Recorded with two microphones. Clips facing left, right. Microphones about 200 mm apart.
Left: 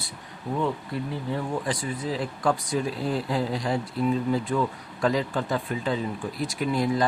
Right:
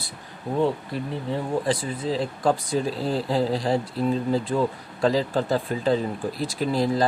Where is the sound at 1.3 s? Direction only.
30° right (ahead or behind).